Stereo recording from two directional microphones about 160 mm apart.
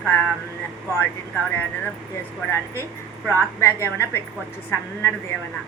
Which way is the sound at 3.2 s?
15° left (ahead or behind).